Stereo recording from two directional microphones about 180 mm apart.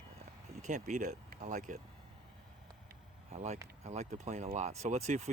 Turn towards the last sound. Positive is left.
turn(degrees=-40)  # may be behind; listen again after turning